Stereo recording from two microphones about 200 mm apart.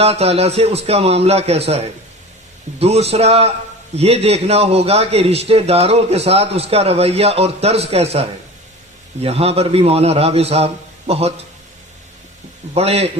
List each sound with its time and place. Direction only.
0.0 s a man's voice: 30° right (ahead or behind)
12.7 s a man's voice: 30° right (ahead or behind)